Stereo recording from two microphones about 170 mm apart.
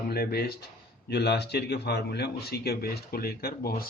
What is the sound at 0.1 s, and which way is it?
A man's voice, 65° left (ahead or behind).